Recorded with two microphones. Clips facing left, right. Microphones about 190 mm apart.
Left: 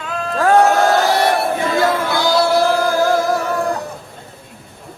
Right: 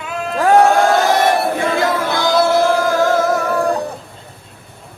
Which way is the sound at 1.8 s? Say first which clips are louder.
Even; 20° right (ahead or behind).